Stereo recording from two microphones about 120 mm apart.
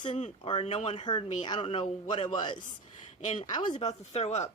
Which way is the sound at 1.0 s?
40° left (ahead or behind).